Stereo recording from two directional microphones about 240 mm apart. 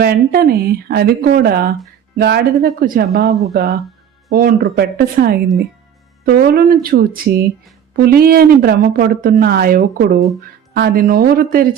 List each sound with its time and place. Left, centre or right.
0.0 s a woman's voice: right